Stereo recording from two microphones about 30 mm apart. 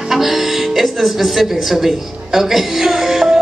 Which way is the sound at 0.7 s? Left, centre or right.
Centre.